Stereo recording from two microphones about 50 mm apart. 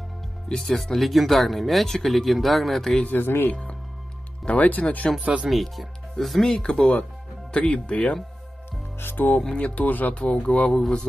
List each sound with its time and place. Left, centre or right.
0.5 s speech: centre
3.1 s speech: left
4.5 s speech: left
5.2 s speech: right
5.5 s speech: centre
6.4 s speech: centre
9.0 s speech: left
9.6 s speech: left
10.4 s speech: left
10.7 s speech: centre